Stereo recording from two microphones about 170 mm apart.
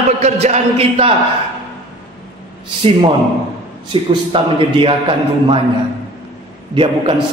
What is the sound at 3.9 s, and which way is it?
Speech, 30° right (ahead or behind).